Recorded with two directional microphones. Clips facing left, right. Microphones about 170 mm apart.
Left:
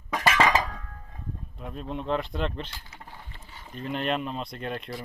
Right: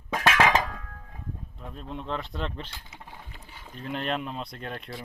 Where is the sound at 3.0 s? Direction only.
Centre (ahead or behind).